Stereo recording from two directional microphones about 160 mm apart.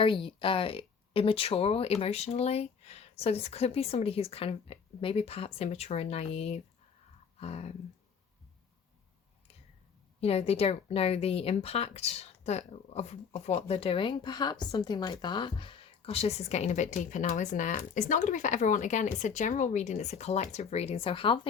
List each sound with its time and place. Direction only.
0.0 s speech: 35° left (ahead or behind)
7.3 s a sound: 40° left (ahead or behind)
10.2 s speech: 40° left (ahead or behind)